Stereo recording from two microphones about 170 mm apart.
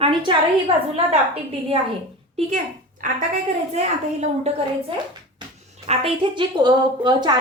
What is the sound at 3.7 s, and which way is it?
A woman's voice, 40° right (ahead or behind).